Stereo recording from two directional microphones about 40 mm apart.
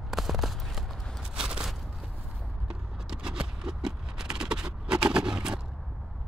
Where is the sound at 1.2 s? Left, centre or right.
Centre.